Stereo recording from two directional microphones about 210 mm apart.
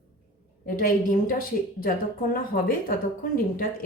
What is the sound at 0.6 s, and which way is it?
A woman's voice, 40° left (ahead or behind).